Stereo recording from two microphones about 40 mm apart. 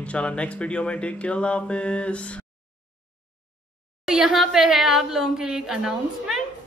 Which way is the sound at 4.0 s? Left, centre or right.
Centre.